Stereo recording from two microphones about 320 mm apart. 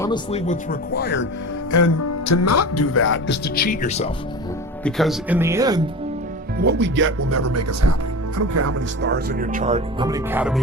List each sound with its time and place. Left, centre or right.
0.0 s speech: centre; by 1.3 s left
1.7 s speech: left; by 4.1 s centre
4.8 s speech: centre
6.6 s speech: right
7.2 s speech: right
8.6 s speech: right; by 10.6 s centre